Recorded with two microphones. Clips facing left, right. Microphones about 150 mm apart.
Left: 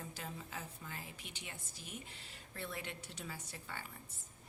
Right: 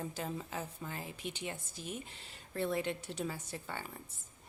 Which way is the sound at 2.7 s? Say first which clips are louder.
Right 11 dB; 30° right (ahead or behind).